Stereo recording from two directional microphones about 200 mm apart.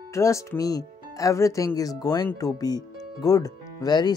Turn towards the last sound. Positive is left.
turn(degrees=20)  # may be behind; listen again after turning